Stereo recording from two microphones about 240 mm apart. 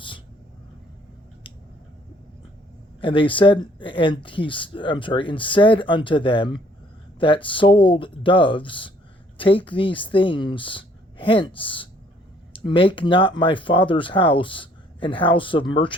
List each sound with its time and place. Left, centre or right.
3.0 s speech: left